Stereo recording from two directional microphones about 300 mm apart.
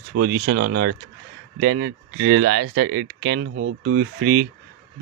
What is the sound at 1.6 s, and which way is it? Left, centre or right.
Speech, right.